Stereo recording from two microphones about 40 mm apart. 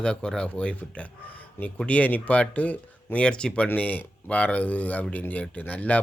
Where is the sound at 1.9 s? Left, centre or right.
Left.